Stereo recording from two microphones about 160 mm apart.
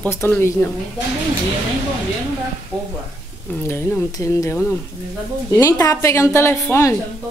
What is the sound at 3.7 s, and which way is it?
A woman's voice, 15° left (ahead or behind).